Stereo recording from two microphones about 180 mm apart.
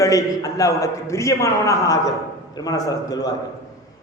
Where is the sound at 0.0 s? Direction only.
20° left (ahead or behind).